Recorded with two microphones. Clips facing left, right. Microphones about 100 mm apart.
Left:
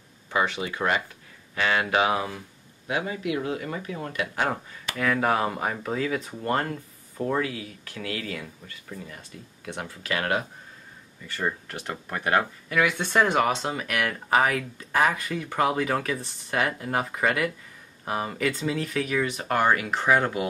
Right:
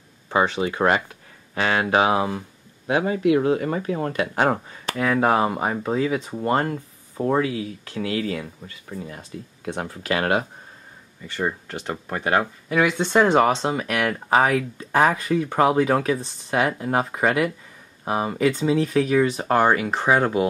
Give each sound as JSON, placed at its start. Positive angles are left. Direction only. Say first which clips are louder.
{"t": 0.3, "sound": "speech", "louder": "right 5 dB", "side_deg": -30}
{"t": 2.9, "sound": "speech", "louder": "right 9 dB", "side_deg": -40}
{"t": 11.7, "sound": "speech", "louder": "right 4 dB", "side_deg": -25}